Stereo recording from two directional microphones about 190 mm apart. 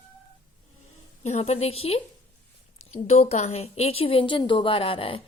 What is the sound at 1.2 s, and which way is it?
Speech, 35° left (ahead or behind).